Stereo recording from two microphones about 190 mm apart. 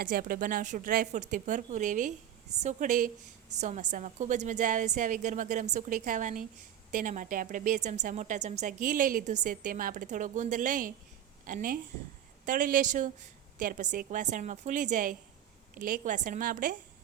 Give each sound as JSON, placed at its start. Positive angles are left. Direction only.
{"t": 0.0, "sound": "a woman's voice", "side_deg": -50}